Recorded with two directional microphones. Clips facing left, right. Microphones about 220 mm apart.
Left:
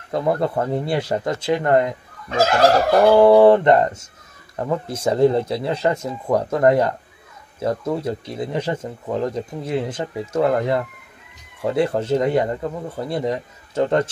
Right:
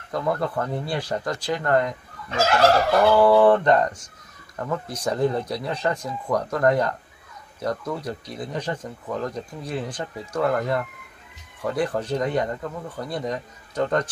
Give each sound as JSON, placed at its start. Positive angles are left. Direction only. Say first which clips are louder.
{"t": 0.1, "sound": "speech", "louder": "left 5 dB", "side_deg": 25}
{"t": 3.1, "sound": "speech", "louder": "left 5 dB", "side_deg": 25}